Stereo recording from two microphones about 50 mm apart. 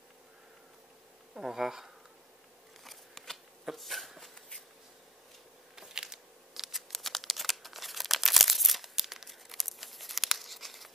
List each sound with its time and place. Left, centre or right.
1.3 s speech: centre
2.8 s scissors: centre
3.7 s a sound: centre
5.8 s scissors: centre